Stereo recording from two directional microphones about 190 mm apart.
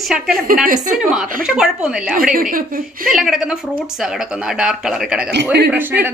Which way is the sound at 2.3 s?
50° right (ahead or behind).